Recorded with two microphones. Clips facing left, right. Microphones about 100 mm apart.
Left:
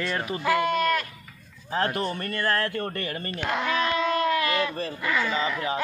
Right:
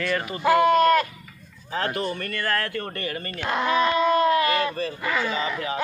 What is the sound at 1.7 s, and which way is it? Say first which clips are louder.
Speech: even; 40° left (ahead or behind).